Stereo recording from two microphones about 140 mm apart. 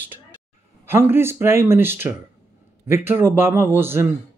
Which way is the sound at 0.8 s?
15° right (ahead or behind).